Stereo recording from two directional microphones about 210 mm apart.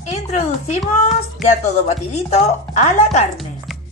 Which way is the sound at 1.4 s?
30° left (ahead or behind).